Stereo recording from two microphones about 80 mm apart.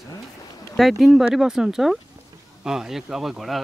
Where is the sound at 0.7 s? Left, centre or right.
Centre.